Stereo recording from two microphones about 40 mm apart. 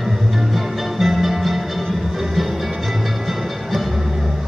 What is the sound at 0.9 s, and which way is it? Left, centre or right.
Music, centre.